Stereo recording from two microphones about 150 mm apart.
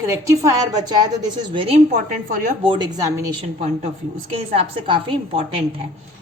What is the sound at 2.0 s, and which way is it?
Speech, 65° right (ahead or behind).